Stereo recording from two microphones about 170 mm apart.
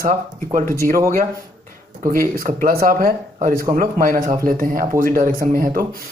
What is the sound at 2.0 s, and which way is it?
Speech, 55° right (ahead or behind).